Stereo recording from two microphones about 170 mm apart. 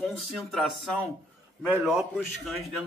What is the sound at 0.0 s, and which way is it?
Speech, centre (ahead or behind).